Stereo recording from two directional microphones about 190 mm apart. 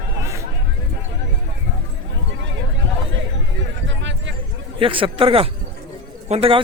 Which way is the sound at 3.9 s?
70° right (ahead or behind).